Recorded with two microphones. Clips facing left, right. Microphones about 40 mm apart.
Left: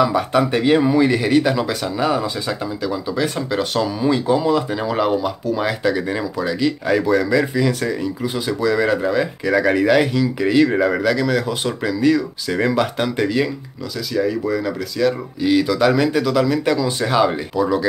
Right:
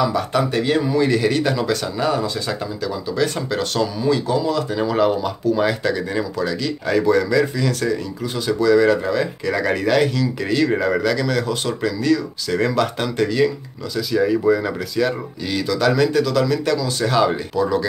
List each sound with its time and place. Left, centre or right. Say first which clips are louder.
0.0 s speech: left 3 dB; centre
4.7 s speech: right 1 dB; centre
13.9 s speech: right 2 dB; centre
15.4 s speech: left 4 dB; centre